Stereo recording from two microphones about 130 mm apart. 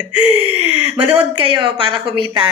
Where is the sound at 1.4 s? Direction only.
40° right (ahead or behind).